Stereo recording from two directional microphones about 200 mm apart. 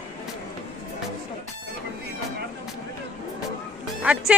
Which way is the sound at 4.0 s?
5° right (ahead or behind).